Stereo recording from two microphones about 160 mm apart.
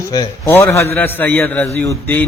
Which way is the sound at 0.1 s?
25° left (ahead or behind).